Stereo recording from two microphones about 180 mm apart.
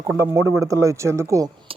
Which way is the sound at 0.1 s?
15° right (ahead or behind).